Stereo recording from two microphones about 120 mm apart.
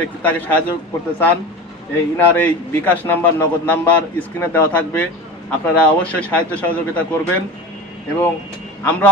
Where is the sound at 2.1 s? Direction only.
15° left (ahead or behind).